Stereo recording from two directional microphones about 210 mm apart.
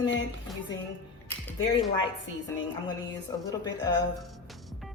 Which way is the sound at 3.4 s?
20° left (ahead or behind).